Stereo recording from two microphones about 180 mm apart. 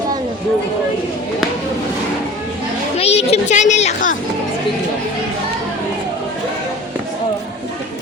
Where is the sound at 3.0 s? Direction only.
35° left (ahead or behind).